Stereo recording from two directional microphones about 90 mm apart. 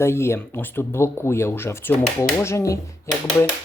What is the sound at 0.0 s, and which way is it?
Speech, 30° left (ahead or behind).